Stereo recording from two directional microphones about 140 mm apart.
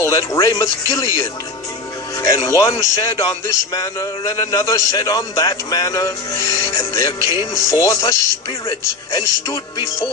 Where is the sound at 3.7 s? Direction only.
25° left (ahead or behind).